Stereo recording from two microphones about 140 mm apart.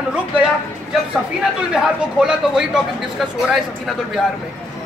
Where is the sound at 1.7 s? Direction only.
5° right (ahead or behind).